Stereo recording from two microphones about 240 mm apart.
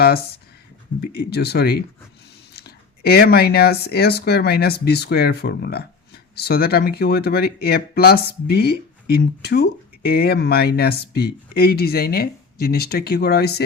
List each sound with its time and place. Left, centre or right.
0.0 s speech: left